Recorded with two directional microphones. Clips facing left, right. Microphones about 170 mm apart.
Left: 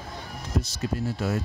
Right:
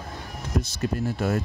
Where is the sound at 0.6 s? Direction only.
55° right (ahead or behind).